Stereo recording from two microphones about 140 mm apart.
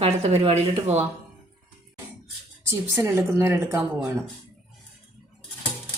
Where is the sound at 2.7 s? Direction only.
20° right (ahead or behind).